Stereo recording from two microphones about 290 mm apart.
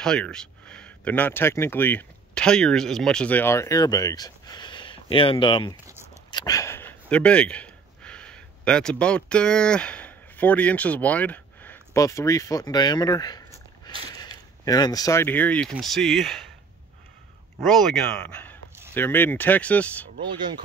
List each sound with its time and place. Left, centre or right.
0.0 s speech: centre
17.6 s speech: centre
20.2 s speech: centre